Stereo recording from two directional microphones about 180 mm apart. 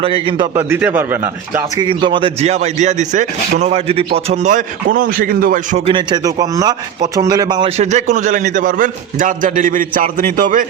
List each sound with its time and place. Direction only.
0.0 s a man's voice: 30° right (ahead or behind)
0.5 s a man's voice: 10° right (ahead or behind)
1.8 s a man's voice: 25° right (ahead or behind); by 5.9 s 45° right (ahead or behind)
5.9 s a man's voice: 25° right (ahead or behind)
7.8 s a man's voice: 40° right (ahead or behind)